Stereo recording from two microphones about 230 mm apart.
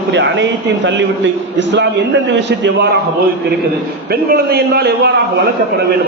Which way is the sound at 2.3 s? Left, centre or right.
Right.